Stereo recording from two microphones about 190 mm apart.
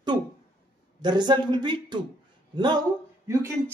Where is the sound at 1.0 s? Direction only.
25° right (ahead or behind).